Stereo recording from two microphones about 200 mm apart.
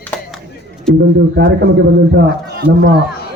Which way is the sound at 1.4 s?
60° right (ahead or behind).